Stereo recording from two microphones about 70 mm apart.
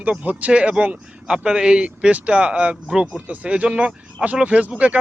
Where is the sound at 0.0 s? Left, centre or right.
Centre.